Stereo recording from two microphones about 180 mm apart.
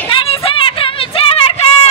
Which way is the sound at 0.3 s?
30° left (ahead or behind).